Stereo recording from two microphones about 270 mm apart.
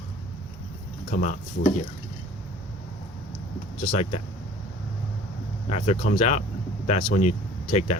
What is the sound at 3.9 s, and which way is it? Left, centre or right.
Speech, left.